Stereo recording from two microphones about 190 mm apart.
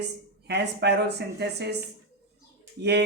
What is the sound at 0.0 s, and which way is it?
Speech, 65° right (ahead or behind).